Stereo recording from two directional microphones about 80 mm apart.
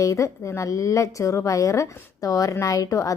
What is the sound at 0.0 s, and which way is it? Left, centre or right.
A woman's voice, left.